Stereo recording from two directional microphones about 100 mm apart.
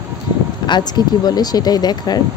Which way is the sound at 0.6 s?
45° left (ahead or behind).